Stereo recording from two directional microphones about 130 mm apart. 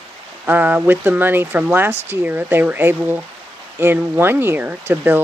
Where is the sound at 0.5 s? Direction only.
10° right (ahead or behind).